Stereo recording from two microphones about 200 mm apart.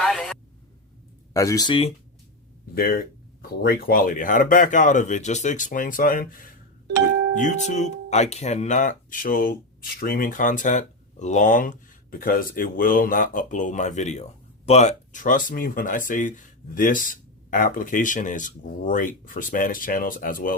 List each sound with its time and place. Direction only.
0.0 s a sound: centre (ahead or behind)
1.3 s speech: 15° left (ahead or behind)
2.7 s speech: 50° left (ahead or behind)